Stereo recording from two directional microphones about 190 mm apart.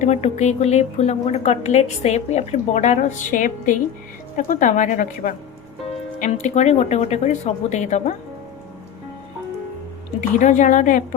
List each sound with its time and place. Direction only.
0.0 s a woman's voice: 35° left (ahead or behind)
10.2 s a woman's voice: 40° left (ahead or behind)